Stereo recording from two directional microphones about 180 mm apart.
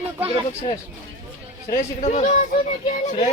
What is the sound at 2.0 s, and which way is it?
Speech, 45° left (ahead or behind).